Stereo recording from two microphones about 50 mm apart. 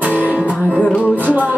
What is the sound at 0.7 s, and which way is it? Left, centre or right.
Music, left.